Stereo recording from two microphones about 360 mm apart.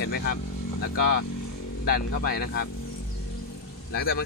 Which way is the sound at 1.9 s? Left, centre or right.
Left.